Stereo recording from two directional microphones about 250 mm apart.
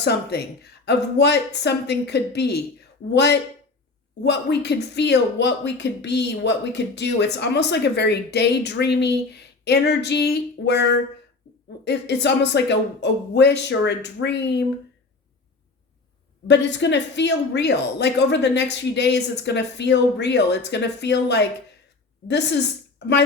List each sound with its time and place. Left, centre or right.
0.0 s speech: left
16.5 s speech: left
23.0 s speech: left